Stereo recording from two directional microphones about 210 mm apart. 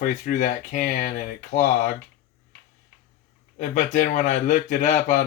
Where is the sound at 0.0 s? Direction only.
40° left (ahead or behind).